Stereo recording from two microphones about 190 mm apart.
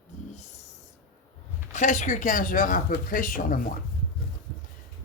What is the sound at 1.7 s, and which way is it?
Speech, 40° left (ahead or behind).